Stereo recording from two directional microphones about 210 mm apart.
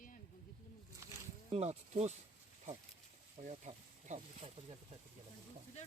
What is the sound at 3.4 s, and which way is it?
Speech, 35° right (ahead or behind).